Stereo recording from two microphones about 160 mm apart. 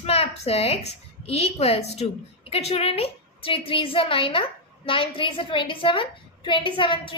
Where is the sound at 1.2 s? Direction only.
40° left (ahead or behind).